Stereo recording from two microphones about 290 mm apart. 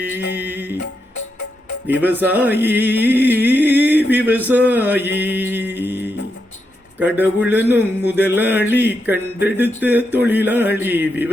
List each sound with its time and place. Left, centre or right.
0.2 s music: left
0.4 s music: centre
0.8 s music: left
2.0 s a man's voice: centre
5.1 s music: centre
7.0 s a man's voice: centre